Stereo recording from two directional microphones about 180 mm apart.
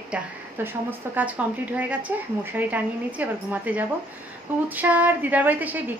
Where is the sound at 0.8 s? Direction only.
10° right (ahead or behind).